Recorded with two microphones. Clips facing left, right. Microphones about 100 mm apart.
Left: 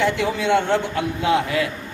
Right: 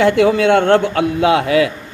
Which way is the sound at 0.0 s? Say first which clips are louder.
Right 9 dB; 80° right.